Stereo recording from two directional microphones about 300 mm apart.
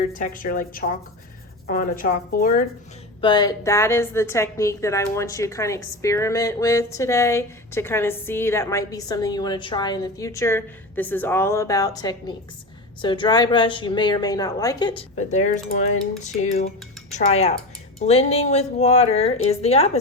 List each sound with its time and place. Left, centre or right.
0.1 s a woman's voice: left
3.2 s a woman's voice: centre